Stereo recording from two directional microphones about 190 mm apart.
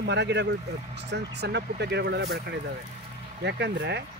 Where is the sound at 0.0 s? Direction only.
65° right (ahead or behind).